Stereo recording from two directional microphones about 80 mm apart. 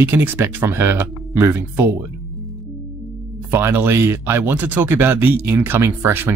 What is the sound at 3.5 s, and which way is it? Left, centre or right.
Speech, right.